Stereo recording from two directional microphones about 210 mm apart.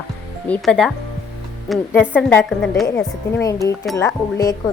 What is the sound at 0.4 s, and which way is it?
A woman's voice, 5° left (ahead or behind).